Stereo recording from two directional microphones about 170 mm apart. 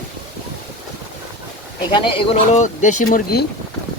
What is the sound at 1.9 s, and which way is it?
Speech, 30° left (ahead or behind).